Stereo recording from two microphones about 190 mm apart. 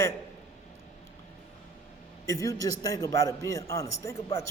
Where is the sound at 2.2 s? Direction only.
15° left (ahead or behind).